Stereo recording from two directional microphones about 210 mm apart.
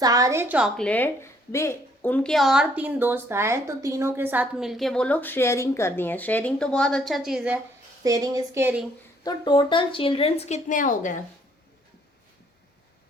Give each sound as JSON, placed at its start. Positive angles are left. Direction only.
{"t": 0.0, "sound": "a woman's voice", "side_deg": -15}
{"t": 8.0, "sound": "speech", "side_deg": -15}
{"t": 9.2, "sound": "speech", "side_deg": 20}